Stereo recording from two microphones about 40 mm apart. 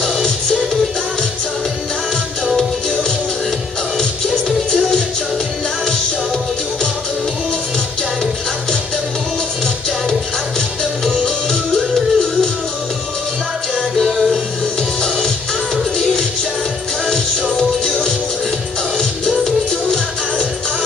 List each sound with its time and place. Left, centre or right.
0.0 s music: centre
4.5 s music: centre
11.2 s music: centre
14.0 s music: centre
15.0 s music: centre
17.1 s music: centre